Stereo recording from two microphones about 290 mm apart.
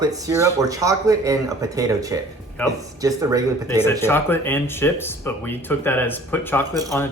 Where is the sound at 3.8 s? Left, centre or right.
Centre.